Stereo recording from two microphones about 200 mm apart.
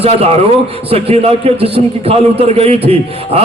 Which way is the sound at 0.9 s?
30° right (ahead or behind).